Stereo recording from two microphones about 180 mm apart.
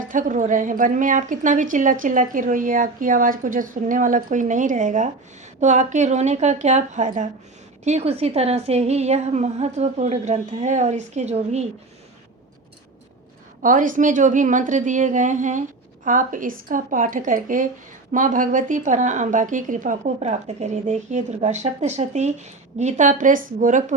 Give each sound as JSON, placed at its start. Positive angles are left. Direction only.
{"t": 0.0, "sound": "a woman's voice", "side_deg": -45}
{"t": 13.6, "sound": "a woman's voice", "side_deg": -45}